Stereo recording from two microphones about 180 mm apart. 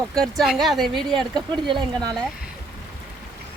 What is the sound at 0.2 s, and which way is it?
Speech, centre (ahead or behind).